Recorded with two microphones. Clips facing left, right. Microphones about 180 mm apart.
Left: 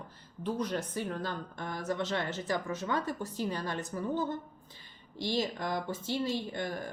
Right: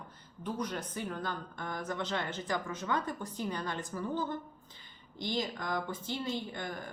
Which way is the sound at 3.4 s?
20° left (ahead or behind).